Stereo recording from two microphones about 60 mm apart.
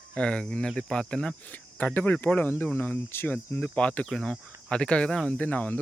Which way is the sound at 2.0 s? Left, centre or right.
Left.